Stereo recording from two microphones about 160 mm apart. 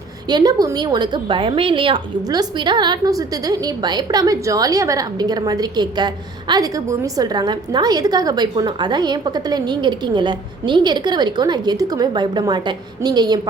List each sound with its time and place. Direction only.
0.3 s a woman's voice: 25° right (ahead or behind)